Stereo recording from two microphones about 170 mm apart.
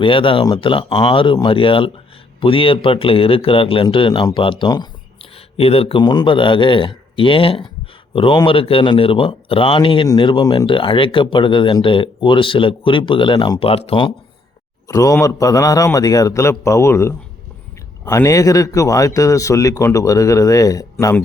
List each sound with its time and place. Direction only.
0.0 s speech: 30° left (ahead or behind)
14.8 s speech: 20° left (ahead or behind)